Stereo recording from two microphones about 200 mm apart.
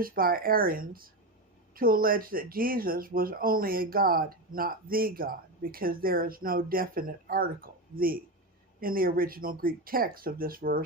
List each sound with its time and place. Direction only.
0.0 s speech: 45° right (ahead or behind)